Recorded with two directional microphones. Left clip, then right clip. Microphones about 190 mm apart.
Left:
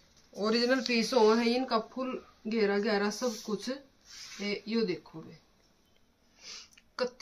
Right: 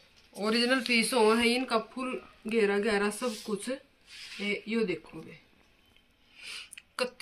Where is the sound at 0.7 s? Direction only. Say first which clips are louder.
Right 1 dB; 15° left (ahead or behind).